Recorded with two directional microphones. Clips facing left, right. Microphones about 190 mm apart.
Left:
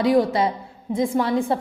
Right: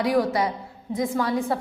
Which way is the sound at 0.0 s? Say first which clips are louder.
Left 4 dB; 25° left (ahead or behind).